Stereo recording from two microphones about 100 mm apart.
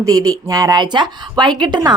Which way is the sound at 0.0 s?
35° right (ahead or behind).